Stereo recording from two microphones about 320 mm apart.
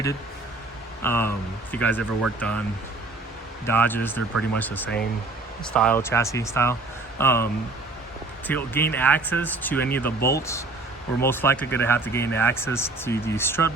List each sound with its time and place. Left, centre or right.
1.0 s speech: centre
3.7 s speech: centre